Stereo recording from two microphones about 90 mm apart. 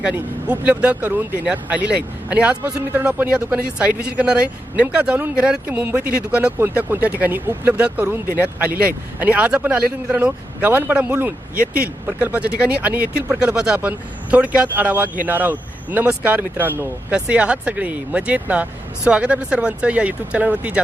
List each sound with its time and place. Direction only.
0.0 s speech: 10° right (ahead or behind)
5.6 s speech: 20° right (ahead or behind)